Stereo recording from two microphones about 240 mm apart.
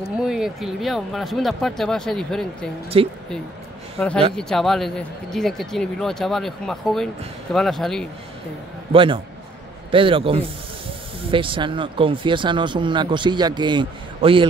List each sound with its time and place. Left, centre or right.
0.2 s speech: centre
2.9 s speech: right
4.0 s speech: centre
8.9 s speech: right